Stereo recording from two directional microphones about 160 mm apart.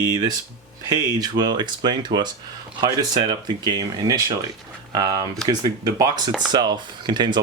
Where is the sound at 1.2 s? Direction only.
25° right (ahead or behind).